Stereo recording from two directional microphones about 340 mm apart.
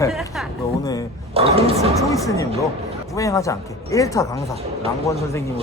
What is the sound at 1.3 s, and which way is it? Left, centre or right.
Speech, centre.